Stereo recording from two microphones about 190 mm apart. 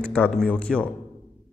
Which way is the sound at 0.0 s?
5° left (ahead or behind).